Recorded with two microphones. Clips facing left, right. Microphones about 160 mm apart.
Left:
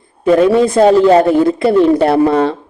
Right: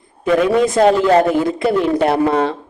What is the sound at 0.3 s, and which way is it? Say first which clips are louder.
Speech: left 4 dB; 35° left (ahead or behind).